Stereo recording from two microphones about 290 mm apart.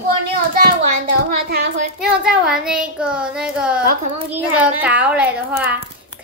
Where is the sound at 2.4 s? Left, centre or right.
Centre.